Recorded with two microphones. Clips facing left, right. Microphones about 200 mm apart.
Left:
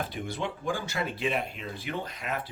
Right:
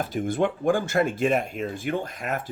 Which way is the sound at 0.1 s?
50° right (ahead or behind).